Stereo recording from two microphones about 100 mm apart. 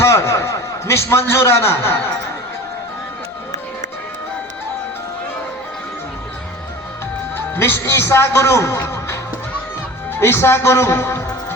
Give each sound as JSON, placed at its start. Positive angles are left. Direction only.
{"t": 0.0, "sound": "chuckle", "side_deg": 25}
{"t": 7.3, "sound": "a man's voice", "side_deg": 25}
{"t": 10.2, "sound": "a man's voice", "side_deg": 25}